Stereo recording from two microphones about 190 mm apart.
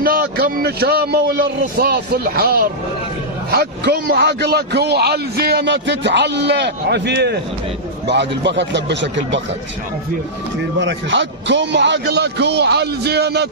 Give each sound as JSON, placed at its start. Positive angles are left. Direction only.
{"t": 0.0, "sound": "a man's voice", "side_deg": -50}
{"t": 10.8, "sound": "a man's voice", "side_deg": -70}